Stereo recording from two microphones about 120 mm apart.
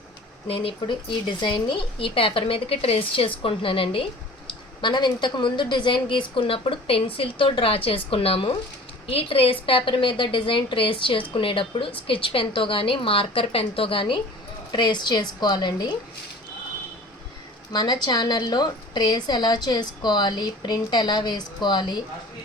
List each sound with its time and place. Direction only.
0.4 s a woman's voice: 50° left (ahead or behind)
17.7 s a woman's voice: 35° left (ahead or behind)